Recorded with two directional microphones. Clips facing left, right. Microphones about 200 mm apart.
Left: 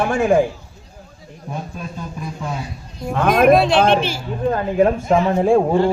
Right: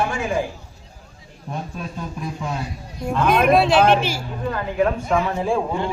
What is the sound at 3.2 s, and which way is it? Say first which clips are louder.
Speech: left 4 dB; 50° left (ahead or behind).